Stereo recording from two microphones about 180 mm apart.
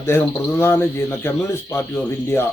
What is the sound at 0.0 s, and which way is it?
Speech, 15° left (ahead or behind).